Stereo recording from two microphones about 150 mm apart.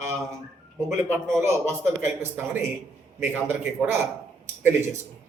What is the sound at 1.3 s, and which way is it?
A man's voice, 20° right (ahead or behind).